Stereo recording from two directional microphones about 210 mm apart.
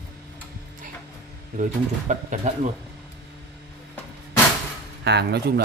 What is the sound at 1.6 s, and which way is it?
Speech, 35° right (ahead or behind).